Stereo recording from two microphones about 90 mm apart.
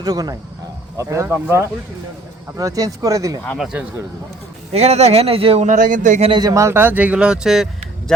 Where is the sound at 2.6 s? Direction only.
40° right (ahead or behind).